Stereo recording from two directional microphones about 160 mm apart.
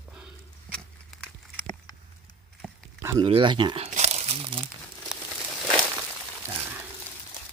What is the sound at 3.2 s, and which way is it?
Speech, 30° right (ahead or behind).